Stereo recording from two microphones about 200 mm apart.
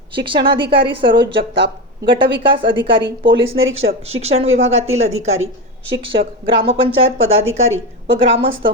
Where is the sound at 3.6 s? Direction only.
80° right.